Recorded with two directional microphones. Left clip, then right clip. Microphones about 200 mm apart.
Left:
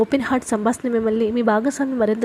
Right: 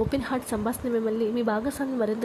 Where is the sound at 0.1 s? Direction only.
25° left (ahead or behind).